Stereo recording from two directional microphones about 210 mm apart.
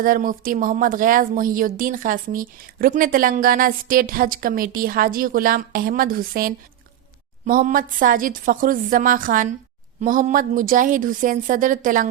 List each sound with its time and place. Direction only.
0.0 s a woman's voice: 40° right (ahead or behind)